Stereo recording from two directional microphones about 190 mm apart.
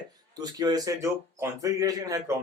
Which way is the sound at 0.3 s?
20° right (ahead or behind).